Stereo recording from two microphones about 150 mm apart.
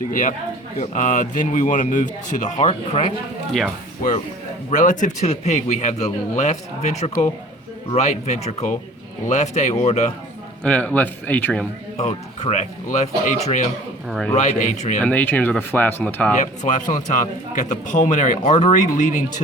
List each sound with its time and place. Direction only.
0.1 s speech: 60° left (ahead or behind)
2.6 s speech: 40° left (ahead or behind)
4.7 s speech: 60° left (ahead or behind)
10.6 s a man's voice: 10° left (ahead or behind)
11.9 s speech: 50° left (ahead or behind)
15.0 s a man's voice: 10° left (ahead or behind)
16.4 s speech: 55° left (ahead or behind)